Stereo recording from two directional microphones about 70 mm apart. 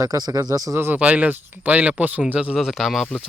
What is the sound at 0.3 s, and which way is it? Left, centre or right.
Speech, right.